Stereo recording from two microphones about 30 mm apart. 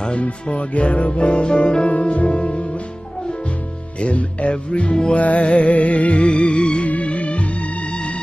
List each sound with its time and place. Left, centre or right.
0.5 s music: left
1.9 s music: left
4.0 s music: left
6.9 s music: left